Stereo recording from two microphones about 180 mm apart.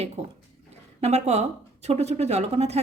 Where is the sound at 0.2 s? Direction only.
35° right (ahead or behind).